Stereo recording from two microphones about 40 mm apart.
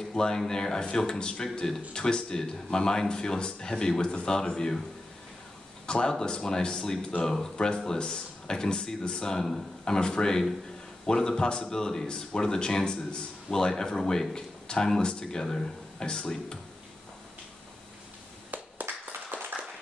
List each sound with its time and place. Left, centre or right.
0.1 s speech: centre
5.9 s speech: centre
18.5 s clapping: right